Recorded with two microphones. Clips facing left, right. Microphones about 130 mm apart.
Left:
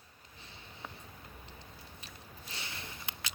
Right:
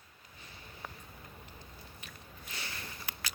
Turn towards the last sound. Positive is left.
turn(degrees=25)  # may be behind; listen again after turning